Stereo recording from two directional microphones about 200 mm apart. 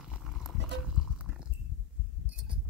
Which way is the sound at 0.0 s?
5° right (ahead or behind).